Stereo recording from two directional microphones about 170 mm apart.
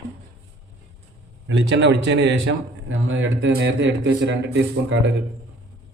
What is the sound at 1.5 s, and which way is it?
A man's voice, 90° right.